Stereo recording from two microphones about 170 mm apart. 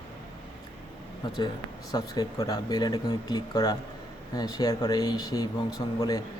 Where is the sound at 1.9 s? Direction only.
25° left (ahead or behind).